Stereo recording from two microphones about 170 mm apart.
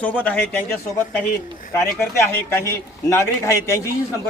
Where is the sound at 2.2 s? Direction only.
15° left (ahead or behind).